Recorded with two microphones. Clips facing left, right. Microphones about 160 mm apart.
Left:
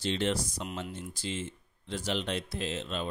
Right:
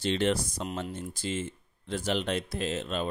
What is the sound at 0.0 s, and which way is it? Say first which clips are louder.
Speech: right 3 dB; 55° right (ahead or behind).